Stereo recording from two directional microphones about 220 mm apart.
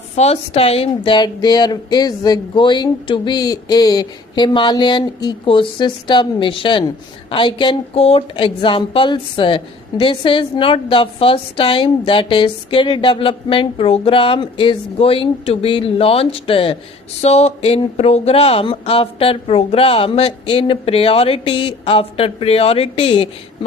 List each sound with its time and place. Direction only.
0.2 s speech: 30° left (ahead or behind)